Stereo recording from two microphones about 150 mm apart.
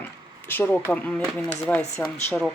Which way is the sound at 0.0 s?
15° left (ahead or behind).